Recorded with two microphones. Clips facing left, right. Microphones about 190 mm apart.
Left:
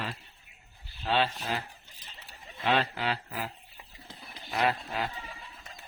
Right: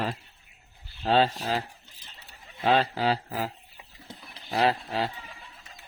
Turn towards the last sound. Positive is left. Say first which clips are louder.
# right 4 dB
turn(degrees=-30)  # may be behind; listen again after turning